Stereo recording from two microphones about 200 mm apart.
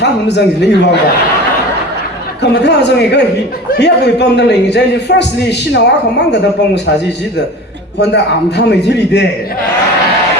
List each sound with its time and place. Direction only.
0.0 s a man's voice: 60° left (ahead or behind)
2.4 s a man's voice: 60° left (ahead or behind)
7.9 s a man's voice: 60° left (ahead or behind)